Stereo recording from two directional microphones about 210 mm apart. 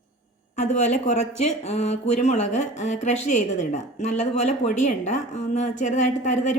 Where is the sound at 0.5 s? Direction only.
35° left (ahead or behind).